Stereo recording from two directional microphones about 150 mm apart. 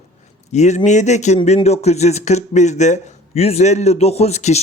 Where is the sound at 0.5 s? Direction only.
50° left (ahead or behind).